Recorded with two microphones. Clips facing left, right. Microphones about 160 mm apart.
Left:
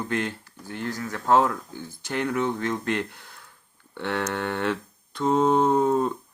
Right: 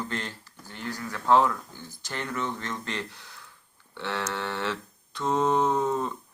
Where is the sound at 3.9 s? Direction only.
55° left (ahead or behind).